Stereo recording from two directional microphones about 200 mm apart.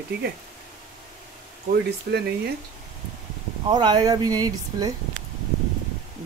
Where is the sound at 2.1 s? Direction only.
55° right (ahead or behind).